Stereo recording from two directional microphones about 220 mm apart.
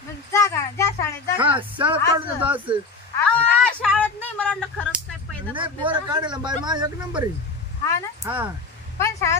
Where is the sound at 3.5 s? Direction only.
5° left (ahead or behind).